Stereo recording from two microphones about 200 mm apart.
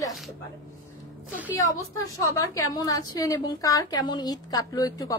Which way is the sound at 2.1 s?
15° left (ahead or behind).